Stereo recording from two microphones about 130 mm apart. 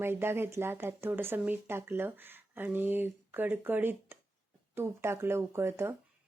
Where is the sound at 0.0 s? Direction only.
20° right (ahead or behind).